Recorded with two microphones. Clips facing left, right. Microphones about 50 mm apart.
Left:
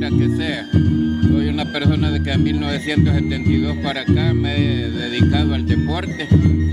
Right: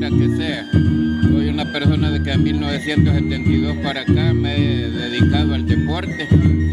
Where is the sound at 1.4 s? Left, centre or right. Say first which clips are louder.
Even; centre.